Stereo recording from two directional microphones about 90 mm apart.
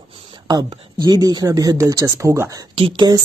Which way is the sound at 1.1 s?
45° right (ahead or behind).